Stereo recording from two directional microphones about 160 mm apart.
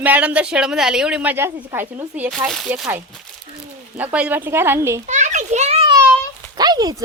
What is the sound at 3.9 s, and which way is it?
Speech, 10° right (ahead or behind).